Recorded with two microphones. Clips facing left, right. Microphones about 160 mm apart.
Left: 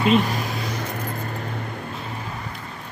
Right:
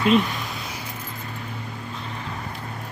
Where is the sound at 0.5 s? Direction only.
55° left (ahead or behind).